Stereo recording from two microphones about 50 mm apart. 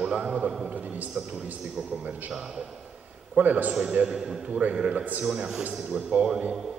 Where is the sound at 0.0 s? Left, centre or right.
Centre.